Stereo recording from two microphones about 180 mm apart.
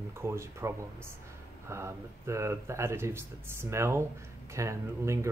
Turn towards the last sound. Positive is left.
turn(degrees=-15)  # may be behind; listen again after turning